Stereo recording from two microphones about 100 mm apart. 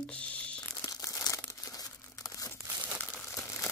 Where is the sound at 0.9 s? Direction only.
35° left (ahead or behind).